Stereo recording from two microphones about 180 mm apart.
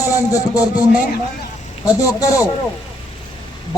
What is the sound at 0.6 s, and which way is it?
Speech, 10° right (ahead or behind).